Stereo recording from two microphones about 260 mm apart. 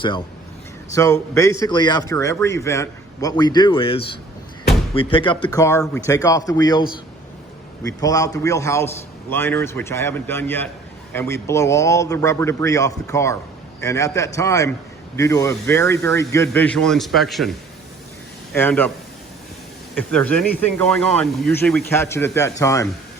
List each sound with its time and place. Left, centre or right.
0.9 s a man's voice: centre
7.9 s a man's voice: centre
18.5 s a man's voice: centre
20.0 s a man's voice: centre